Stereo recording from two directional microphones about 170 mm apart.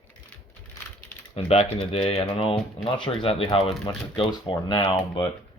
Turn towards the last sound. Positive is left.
turn(degrees=25)  # may be behind; listen again after turning